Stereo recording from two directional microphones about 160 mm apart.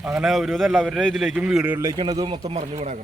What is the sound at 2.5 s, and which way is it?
Speech, 45° right (ahead or behind).